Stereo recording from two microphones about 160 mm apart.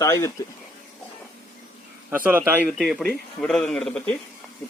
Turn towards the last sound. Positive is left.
turn(degrees=10)  # may be behind; listen again after turning